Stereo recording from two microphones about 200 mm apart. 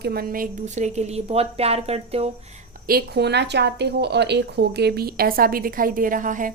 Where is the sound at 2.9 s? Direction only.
50° right (ahead or behind).